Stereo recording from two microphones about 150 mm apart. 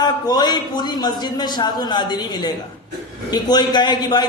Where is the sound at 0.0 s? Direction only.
25° left (ahead or behind).